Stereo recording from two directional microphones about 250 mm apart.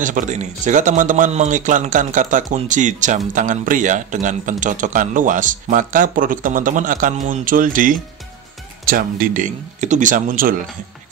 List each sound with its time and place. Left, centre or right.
0.0 s a man's voice: right